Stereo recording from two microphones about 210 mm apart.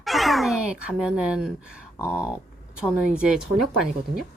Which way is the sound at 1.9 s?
15° left (ahead or behind).